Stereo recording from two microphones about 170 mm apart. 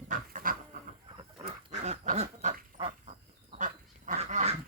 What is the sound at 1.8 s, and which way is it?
Duck, 40° right (ahead or behind).